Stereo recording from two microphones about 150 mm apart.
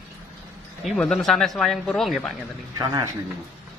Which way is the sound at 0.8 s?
Centre (ahead or behind).